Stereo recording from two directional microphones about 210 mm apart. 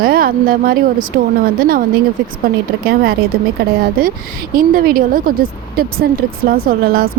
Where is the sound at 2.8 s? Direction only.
45° right (ahead or behind).